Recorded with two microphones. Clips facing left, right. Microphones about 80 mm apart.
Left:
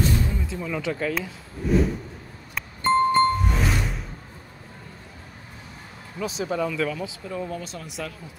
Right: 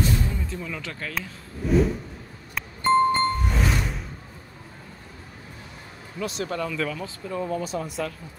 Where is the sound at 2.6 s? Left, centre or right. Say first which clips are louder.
Right 1 dB; centre.